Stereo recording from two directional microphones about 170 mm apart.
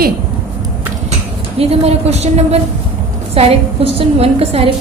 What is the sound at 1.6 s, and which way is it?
A woman's voice, 35° right (ahead or behind).